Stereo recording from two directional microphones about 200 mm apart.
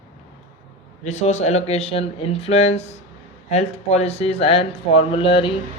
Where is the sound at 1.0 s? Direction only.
35° left (ahead or behind).